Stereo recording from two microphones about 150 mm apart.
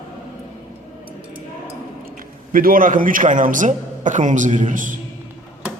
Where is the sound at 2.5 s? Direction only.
70° right (ahead or behind).